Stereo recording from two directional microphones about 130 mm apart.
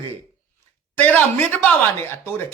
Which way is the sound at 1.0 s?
10° left (ahead or behind).